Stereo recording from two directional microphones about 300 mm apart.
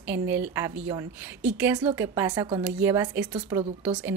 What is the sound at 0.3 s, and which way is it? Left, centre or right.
A woman's voice, centre.